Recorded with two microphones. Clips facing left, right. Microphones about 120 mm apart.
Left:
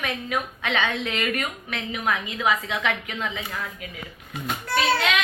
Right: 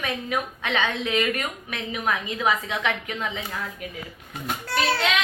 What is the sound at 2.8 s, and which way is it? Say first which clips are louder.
Speech: even; 25° right (ahead or behind).